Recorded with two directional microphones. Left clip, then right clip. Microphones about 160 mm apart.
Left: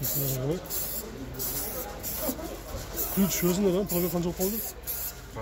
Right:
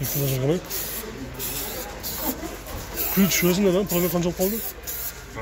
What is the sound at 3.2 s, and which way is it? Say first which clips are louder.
Speech: right 6 dB; 15° right (ahead or behind).